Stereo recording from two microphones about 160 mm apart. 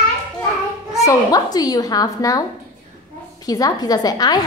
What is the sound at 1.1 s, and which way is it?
A woman's voice, 25° left (ahead or behind).